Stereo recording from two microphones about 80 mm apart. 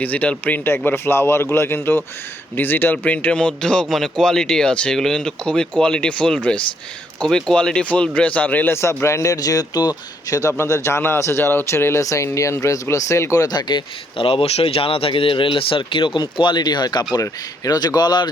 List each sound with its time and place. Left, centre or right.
0.0 s speech: centre
8.7 s a man's voice: left
10.6 s speech: left
15.1 s a man's voice: left